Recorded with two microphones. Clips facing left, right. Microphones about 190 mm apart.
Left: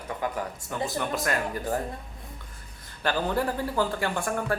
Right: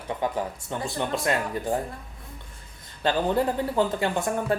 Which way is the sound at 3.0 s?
20° right (ahead or behind).